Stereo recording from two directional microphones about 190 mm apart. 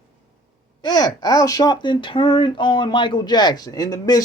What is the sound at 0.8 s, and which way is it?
A man's voice, 20° left (ahead or behind).